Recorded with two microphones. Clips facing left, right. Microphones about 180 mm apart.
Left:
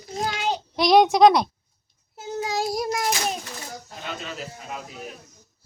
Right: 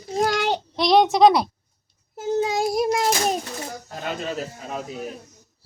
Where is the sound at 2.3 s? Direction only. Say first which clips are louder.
Right 4 dB; 25° right (ahead or behind).